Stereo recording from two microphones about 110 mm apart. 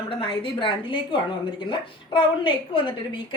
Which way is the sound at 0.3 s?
50° left (ahead or behind).